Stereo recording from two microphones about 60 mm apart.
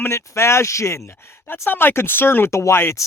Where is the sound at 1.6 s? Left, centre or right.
Left.